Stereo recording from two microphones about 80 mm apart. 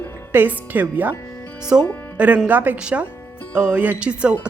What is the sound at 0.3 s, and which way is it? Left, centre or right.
A woman's voice, right.